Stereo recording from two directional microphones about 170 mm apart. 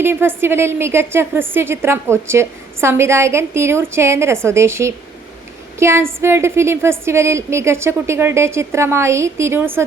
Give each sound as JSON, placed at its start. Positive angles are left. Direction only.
{"t": 0.0, "sound": "a woman's voice", "side_deg": -15}